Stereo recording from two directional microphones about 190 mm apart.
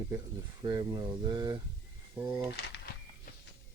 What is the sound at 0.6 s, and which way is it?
Speech, 20° right (ahead or behind).